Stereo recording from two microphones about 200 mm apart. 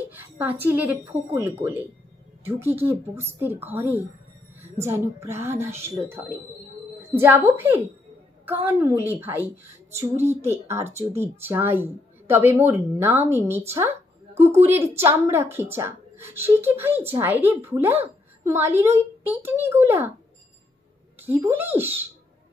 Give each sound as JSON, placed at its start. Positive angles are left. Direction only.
{"t": 0.1, "sound": "a woman's voice", "side_deg": -10}
{"t": 10.1, "sound": "speech", "side_deg": -35}
{"t": 11.0, "sound": "speech", "side_deg": -10}
{"t": 13.7, "sound": "a sound", "side_deg": -10}
{"t": 14.7, "sound": "speech", "side_deg": -10}
{"t": 21.2, "sound": "speech", "side_deg": -10}